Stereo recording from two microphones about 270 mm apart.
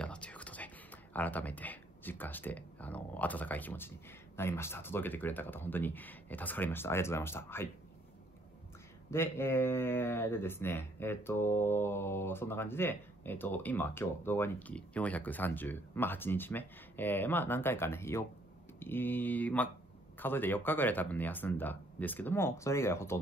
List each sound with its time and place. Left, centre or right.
0.0 s whispering: centre
1.1 s speech: centre
9.1 s speech: centre